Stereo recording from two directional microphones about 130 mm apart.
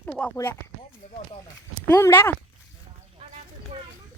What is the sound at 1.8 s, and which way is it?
Speech, 20° left (ahead or behind).